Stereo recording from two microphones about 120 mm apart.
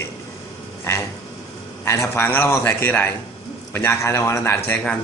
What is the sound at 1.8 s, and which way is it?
A man's voice, 25° left (ahead or behind).